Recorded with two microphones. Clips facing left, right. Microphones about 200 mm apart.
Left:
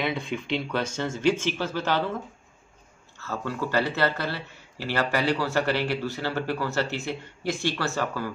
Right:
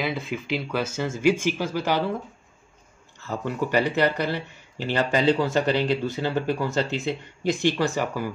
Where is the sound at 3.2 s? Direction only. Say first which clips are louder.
Right 3 dB; 15° right (ahead or behind).